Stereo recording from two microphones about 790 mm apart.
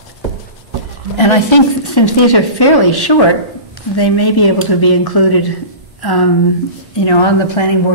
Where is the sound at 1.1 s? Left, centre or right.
Left.